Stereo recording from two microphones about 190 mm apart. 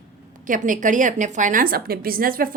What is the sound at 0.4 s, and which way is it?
A woman's voice, 45° right (ahead or behind).